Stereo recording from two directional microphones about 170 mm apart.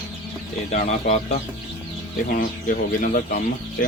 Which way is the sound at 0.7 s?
45° left (ahead or behind).